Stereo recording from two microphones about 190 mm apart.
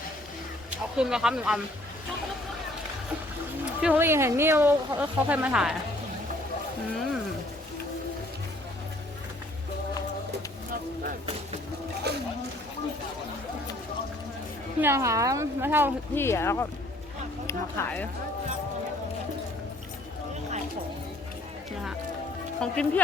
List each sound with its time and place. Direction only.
0.7 s speech: 5° right (ahead or behind)
3.8 s speech: 10° right (ahead or behind)
12.1 s speech: 60° right (ahead or behind)
14.8 s speech: 15° right (ahead or behind)
16.1 s speech: 15° left (ahead or behind)
17.8 s speech: 15° left (ahead or behind)
22.6 s speech: 5° left (ahead or behind)